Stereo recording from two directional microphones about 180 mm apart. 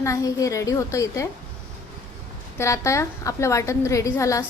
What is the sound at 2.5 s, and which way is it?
A woman's voice, 15° left (ahead or behind).